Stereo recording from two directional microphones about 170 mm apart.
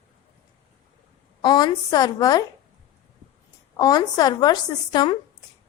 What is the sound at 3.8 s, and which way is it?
A woman's voice, 20° left (ahead or behind).